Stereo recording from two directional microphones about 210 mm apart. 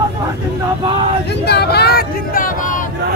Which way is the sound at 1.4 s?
50° left (ahead or behind).